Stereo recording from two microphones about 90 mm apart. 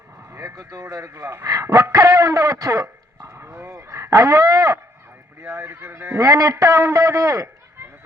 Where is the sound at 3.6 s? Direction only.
30° right (ahead or behind).